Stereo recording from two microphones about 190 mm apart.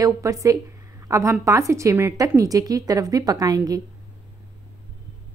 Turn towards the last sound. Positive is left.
turn(degrees=-20)  # may be behind; listen again after turning